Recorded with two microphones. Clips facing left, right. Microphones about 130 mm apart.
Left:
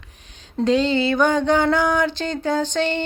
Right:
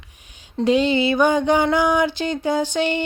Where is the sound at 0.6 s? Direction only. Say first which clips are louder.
Right 1 dB; 15° right (ahead or behind).